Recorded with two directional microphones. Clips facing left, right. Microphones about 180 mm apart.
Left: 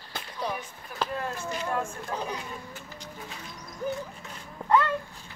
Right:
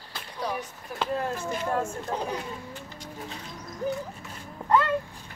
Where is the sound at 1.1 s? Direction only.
45° right (ahead or behind).